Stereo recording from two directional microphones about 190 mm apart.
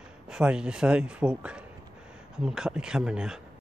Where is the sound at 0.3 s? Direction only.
5° right (ahead or behind).